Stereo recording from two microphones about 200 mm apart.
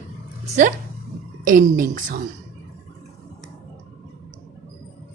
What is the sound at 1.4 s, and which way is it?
Speech, 45° right (ahead or behind).